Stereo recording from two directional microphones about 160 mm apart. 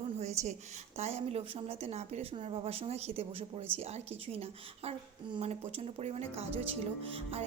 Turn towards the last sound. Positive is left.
turn(degrees=-40)  # may be behind; listen again after turning